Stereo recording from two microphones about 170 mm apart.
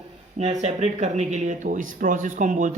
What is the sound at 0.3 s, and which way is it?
Speech, 40° right (ahead or behind).